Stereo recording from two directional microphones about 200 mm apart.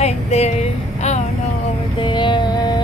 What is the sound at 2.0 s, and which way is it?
Mantra, 25° left (ahead or behind).